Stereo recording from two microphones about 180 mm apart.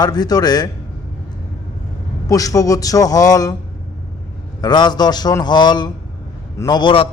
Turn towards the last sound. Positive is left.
turn(degrees=25)  # may be behind; listen again after turning